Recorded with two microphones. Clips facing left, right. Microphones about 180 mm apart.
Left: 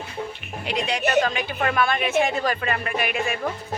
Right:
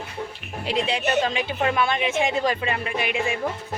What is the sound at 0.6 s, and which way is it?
Speech, 30° right (ahead or behind).